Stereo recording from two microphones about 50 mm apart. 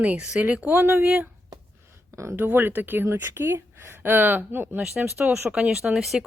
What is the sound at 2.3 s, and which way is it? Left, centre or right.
Speech, right.